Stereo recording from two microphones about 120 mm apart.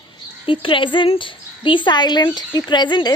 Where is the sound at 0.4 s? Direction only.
45° left (ahead or behind).